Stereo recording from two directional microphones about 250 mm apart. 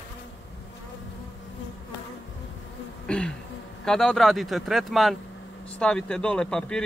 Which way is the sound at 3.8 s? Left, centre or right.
Centre.